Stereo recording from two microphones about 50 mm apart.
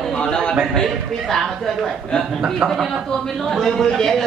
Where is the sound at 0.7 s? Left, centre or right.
Centre.